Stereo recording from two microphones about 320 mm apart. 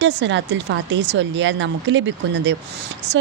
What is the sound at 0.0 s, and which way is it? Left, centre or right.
A woman's voice, right.